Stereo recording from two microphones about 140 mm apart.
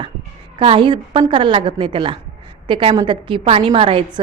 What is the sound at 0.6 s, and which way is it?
A woman's voice, 35° right (ahead or behind).